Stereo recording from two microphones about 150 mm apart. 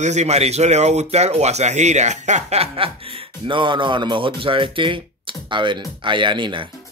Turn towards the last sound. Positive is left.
turn(degrees=-35)  # may be behind; listen again after turning